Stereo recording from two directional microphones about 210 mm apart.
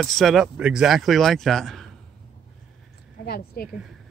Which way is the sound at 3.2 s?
45° left (ahead or behind).